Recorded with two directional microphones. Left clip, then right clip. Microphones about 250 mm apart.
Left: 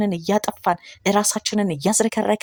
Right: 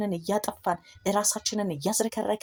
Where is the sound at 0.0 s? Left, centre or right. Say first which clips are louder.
Left 7 dB; left.